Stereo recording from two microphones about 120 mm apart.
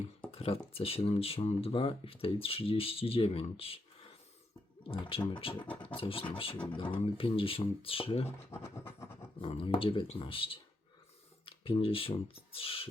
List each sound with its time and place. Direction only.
0.3 s speech: 55° left (ahead or behind)
8.4 s speech: 20° left (ahead or behind)
9.4 s speech: 50° left (ahead or behind)